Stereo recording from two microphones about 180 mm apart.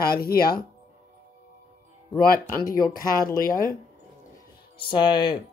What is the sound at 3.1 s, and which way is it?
Speech, 50° left (ahead or behind).